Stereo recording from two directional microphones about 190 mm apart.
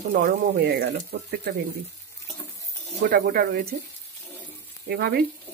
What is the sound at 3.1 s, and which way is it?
Speech, 45° right (ahead or behind).